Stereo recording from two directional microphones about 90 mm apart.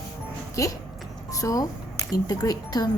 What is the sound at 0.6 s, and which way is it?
A woman's voice, 35° left (ahead or behind).